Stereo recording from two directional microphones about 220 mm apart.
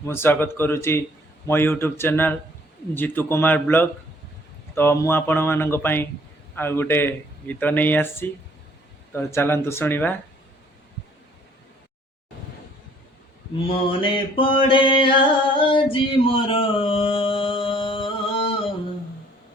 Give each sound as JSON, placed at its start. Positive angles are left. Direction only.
{"t": 0.0, "sound": "speech", "side_deg": 10}
{"t": 13.7, "sound": "mantra", "side_deg": 25}
{"t": 15.5, "sound": "a sound", "side_deg": 25}